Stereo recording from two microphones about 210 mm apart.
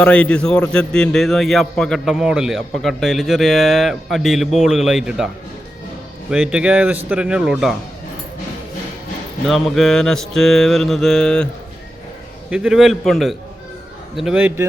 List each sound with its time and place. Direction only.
0.0 s a man's voice: 5° left (ahead or behind)
6.3 s a man's voice: 5° right (ahead or behind)
9.5 s a man's voice: centre (ahead or behind)
12.5 s a man's voice: 5° right (ahead or behind)